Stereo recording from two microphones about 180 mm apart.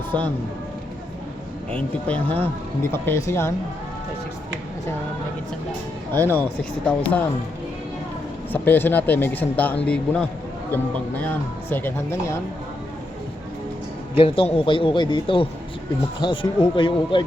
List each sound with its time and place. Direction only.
0.1 s speech: 25° right (ahead or behind)
1.7 s speech: 10° left (ahead or behind)
6.1 s speech: 10° left (ahead or behind)
8.5 s speech: 10° left (ahead or behind)
14.2 s a man's voice: 30° left (ahead or behind)